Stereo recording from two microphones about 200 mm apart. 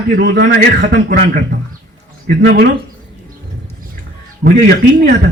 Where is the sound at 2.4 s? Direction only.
50° right (ahead or behind).